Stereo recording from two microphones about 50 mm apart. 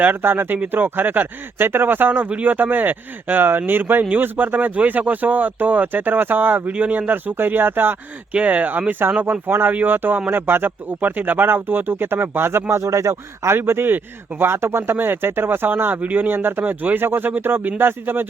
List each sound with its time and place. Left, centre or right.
0.2 s speech: right
7.3 s speech: right
8.3 s speech: right
9.5 s speech: right
12.8 s a man's voice: right
13.6 s speech: right
16.3 s speech: right